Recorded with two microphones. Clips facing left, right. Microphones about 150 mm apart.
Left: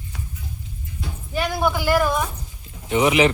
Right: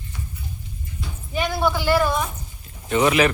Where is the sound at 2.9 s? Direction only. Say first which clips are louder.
Left 1 dB; 15° left (ahead or behind).